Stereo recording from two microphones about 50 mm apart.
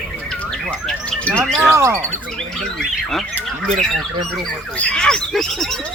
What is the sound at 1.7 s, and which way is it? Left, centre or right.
Speech, right.